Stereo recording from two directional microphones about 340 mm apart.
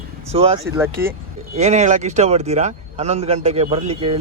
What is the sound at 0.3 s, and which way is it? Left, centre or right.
Speech, centre.